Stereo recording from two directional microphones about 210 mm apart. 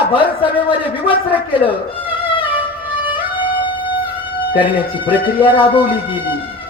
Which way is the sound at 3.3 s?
25° left (ahead or behind).